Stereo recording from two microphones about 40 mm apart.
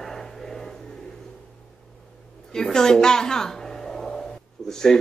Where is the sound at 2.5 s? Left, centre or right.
Centre.